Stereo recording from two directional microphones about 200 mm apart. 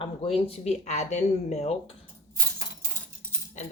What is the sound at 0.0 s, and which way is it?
Speech, 30° left (ahead or behind).